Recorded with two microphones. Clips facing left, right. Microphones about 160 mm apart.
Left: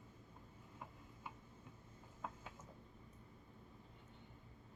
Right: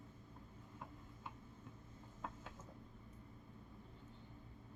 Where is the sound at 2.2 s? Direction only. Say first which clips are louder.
Even; 5° left (ahead or behind).